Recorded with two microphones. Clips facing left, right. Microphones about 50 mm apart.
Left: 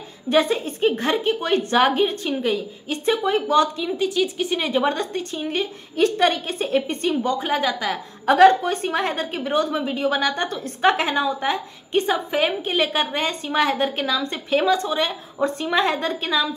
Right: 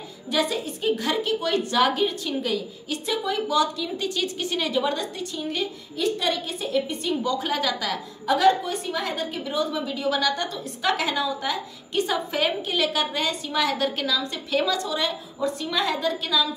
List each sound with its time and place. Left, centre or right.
0.3 s a woman's voice: left
3.9 s a woman's voice: centre; by 6.0 s left
6.0 s a woman's voice: left
7.2 s a woman's voice: left
8.3 s a woman's voice: left
9.8 s a woman's voice: left